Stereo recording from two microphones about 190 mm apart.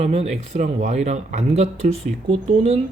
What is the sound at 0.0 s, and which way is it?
Speech, 35° right (ahead or behind).